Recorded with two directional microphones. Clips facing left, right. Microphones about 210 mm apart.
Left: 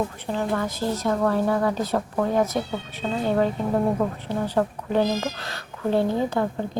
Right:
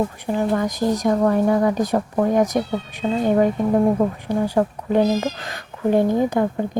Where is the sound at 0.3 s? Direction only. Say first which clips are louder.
Right 6 dB; 15° right (ahead or behind).